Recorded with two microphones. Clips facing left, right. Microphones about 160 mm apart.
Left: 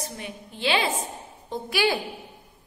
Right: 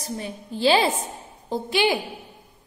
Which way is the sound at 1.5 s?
25° right (ahead or behind).